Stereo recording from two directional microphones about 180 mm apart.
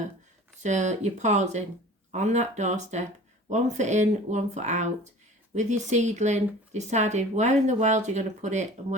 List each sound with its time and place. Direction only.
0.6 s speech: 40° right (ahead or behind)